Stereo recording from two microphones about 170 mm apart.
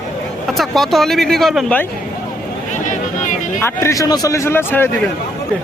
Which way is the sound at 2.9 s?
45° left (ahead or behind).